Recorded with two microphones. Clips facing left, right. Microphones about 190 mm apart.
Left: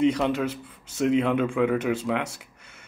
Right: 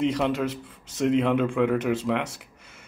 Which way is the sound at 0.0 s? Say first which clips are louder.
Left 2 dB; centre (ahead or behind).